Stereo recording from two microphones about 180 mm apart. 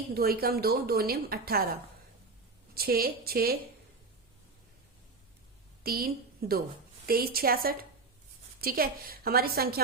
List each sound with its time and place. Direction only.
0.1 s a woman's voice: 60° right (ahead or behind)
2.7 s a woman's voice: 55° right (ahead or behind)
5.8 s a woman's voice: 55° right (ahead or behind)